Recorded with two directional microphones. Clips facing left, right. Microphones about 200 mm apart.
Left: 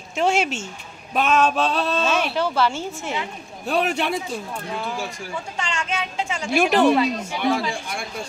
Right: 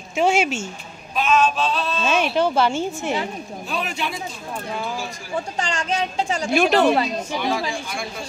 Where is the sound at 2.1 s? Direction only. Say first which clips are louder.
Right 3 dB; 15° right (ahead or behind).